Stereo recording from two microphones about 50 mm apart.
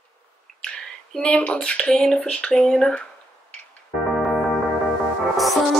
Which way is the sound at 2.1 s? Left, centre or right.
Centre.